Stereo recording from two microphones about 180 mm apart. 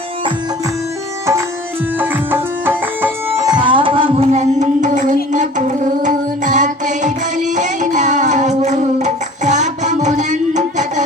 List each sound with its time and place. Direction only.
2.0 s music: 10° right (ahead or behind)
3.5 s music: 25° right (ahead or behind)